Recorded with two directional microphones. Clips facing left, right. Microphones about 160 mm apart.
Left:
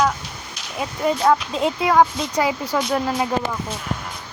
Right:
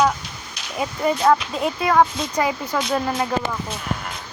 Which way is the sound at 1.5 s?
20° left (ahead or behind).